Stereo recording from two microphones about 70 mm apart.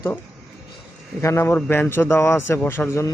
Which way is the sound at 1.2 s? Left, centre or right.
Left.